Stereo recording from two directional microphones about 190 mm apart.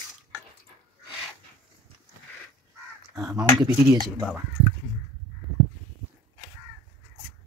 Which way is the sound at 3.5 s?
20° right (ahead or behind).